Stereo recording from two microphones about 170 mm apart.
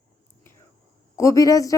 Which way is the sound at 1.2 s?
20° left (ahead or behind).